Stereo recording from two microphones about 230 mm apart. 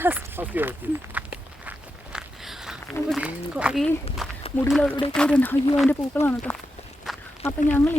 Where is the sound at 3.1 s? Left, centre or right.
Centre.